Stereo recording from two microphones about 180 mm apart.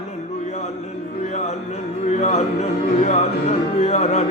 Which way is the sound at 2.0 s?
40° left (ahead or behind).